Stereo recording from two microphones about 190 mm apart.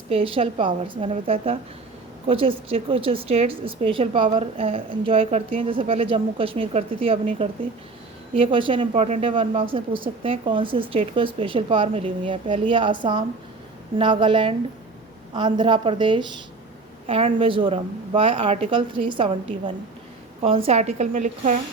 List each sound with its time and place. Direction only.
0.1 s a woman's voice: 30° right (ahead or behind)